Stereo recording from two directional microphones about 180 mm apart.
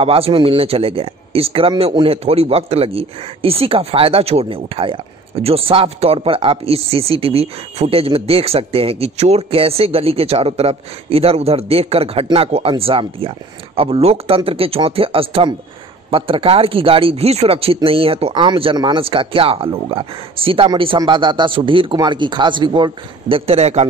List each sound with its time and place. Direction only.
0.0 s a man's voice: 30° right (ahead or behind)